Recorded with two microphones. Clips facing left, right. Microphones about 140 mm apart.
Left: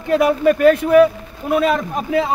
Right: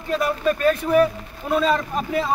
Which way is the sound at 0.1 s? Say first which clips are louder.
Left 7 dB; 65° left (ahead or behind).